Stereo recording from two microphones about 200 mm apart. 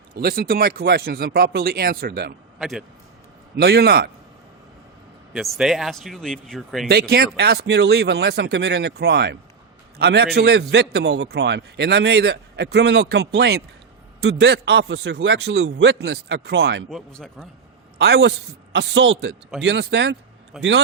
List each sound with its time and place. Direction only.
0.1 s speech: 50° right (ahead or behind)
2.6 s speech: centre (ahead or behind)
3.5 s speech: 55° right (ahead or behind)
5.3 s speech: centre (ahead or behind)
6.8 s a man's voice: 55° right (ahead or behind)
16.9 s speech: 5° left (ahead or behind)
17.9 s a man's voice: 55° right (ahead or behind)